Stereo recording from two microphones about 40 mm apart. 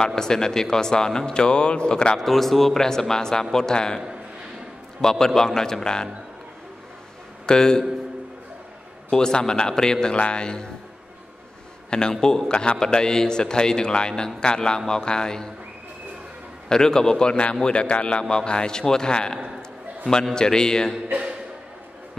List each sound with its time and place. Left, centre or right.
0.0 s speech: centre
2.1 s speech: centre
5.0 s speech: centre
7.4 s speech: centre
9.1 s speech: centre
10.1 s a man's voice: left
11.9 s a man's voice: centre
16.6 s a man's voice: centre